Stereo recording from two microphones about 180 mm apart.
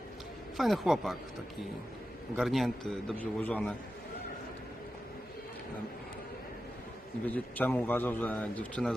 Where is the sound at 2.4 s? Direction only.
Centre (ahead or behind).